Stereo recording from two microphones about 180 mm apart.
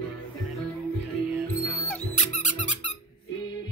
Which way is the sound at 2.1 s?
45° left (ahead or behind).